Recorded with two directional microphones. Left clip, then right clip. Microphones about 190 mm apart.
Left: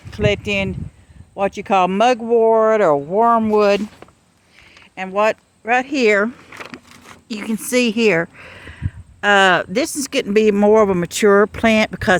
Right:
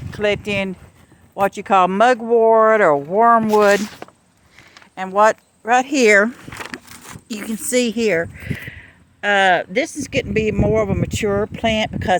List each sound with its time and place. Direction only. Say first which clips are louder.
0.1 s speech: left 1 dB; 5° left (ahead or behind)
4.0 s a sound: right 6 dB; 55° right (ahead or behind)
4.9 s speech: right 3 dB; centre (ahead or behind)
6.5 s a sound: right 3 dB; 50° right (ahead or behind)
7.3 s a woman's voice: left 2 dB; 10° left (ahead or behind)
7.5 s speech: left 1 dB; 20° left (ahead or behind); by 12.1 s 50° left (ahead or behind)